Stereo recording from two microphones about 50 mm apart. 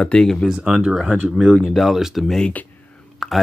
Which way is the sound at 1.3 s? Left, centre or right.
Centre.